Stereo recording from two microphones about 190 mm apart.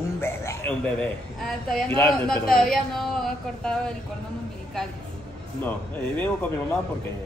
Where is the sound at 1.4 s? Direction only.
Centre (ahead or behind).